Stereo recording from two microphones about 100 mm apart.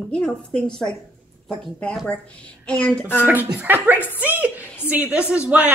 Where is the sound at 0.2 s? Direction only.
10° left (ahead or behind).